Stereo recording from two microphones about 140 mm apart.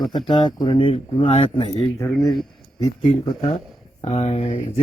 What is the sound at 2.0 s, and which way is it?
Speech, 20° left (ahead or behind).